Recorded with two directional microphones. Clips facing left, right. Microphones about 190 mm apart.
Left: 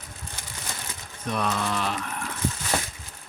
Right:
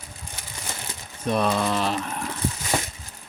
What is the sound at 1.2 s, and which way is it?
Speech, 30° right (ahead or behind).